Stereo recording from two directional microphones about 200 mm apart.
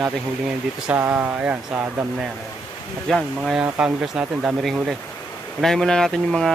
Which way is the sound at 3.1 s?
Centre (ahead or behind).